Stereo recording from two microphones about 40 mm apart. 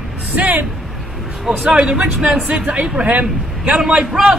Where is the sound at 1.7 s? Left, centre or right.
Right.